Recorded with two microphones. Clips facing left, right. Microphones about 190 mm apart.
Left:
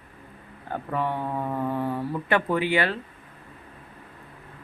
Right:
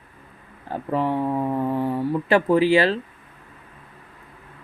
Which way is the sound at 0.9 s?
25° right (ahead or behind).